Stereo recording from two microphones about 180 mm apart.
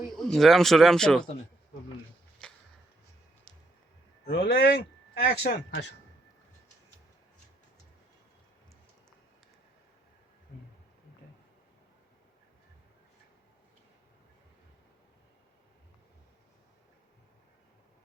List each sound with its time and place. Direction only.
0.2 s speech: centre (ahead or behind)
2.4 s a sound: 5° left (ahead or behind)
3.5 s music: 5° left (ahead or behind)
4.3 s speech: 65° left (ahead or behind)